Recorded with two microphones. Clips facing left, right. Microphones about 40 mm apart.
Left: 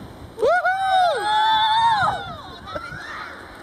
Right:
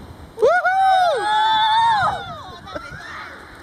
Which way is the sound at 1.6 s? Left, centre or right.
Right.